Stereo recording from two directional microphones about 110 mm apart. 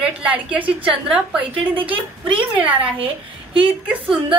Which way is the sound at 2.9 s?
55° right (ahead or behind).